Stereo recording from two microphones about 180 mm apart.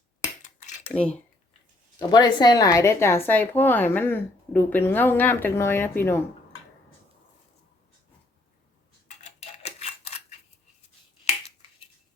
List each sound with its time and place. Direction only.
0.2 s finger snapping: 40° left (ahead or behind)
2.0 s a woman's voice: 25° left (ahead or behind)
9.0 s a sound: 40° left (ahead or behind)